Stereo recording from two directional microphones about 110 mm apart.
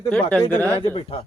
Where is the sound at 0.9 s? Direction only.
65° left (ahead or behind).